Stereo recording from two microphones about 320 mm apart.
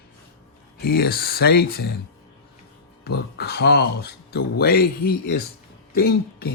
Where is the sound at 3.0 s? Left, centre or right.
Left.